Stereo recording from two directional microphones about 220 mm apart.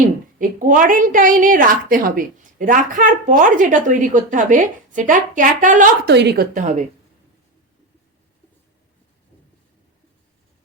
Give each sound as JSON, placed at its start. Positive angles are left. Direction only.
{"t": 0.3, "sound": "a woman's voice", "side_deg": -35}